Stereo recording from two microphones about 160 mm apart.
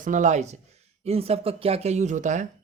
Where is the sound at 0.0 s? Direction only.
50° right (ahead or behind).